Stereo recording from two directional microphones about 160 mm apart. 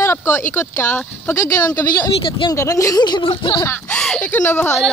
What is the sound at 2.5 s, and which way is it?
Speech, 20° left (ahead or behind).